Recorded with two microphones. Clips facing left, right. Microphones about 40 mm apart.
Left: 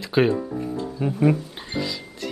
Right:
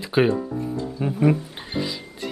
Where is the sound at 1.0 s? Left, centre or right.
Centre.